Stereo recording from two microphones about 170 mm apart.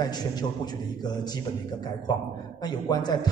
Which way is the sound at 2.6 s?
25° left (ahead or behind).